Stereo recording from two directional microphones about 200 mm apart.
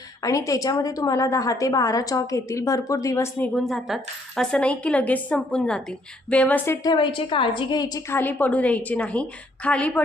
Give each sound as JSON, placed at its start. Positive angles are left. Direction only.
{"t": 0.2, "sound": "a woman's voice", "side_deg": 15}